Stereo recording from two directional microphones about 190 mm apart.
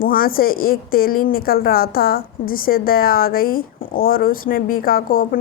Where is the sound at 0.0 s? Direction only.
50° left (ahead or behind).